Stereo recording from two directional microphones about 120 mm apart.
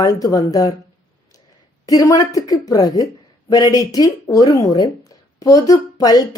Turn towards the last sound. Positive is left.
turn(degrees=30)  # may be behind; listen again after turning